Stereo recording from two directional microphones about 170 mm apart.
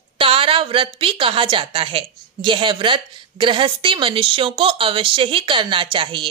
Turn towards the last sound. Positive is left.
turn(degrees=-30)  # may be behind; listen again after turning